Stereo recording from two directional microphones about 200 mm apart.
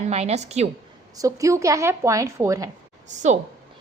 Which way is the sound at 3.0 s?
35° right (ahead or behind).